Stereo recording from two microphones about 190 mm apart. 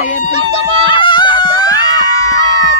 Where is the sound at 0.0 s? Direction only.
40° left (ahead or behind).